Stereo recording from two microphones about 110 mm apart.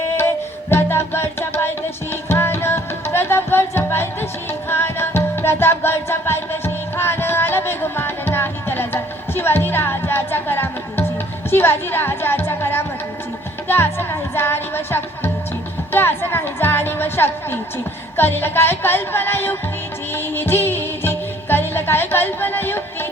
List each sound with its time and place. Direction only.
0.2 s music: 20° left (ahead or behind)
11.5 s a woman's voice: 20° left (ahead or behind)
13.7 s music: 20° left (ahead or behind)
18.2 s a woman's voice: 20° left (ahead or behind)
20.1 s music: 20° left (ahead or behind)